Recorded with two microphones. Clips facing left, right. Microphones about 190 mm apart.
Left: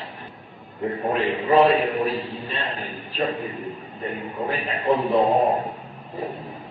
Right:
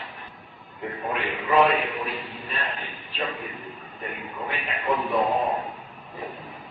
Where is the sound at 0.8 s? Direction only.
35° left (ahead or behind).